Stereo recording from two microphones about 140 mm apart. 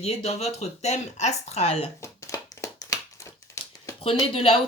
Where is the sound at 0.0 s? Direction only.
45° left (ahead or behind).